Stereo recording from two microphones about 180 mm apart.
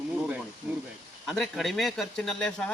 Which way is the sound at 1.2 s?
Centre (ahead or behind).